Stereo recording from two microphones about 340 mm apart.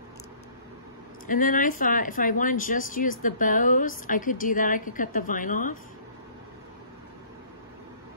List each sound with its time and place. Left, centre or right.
1.2 s a woman's voice: left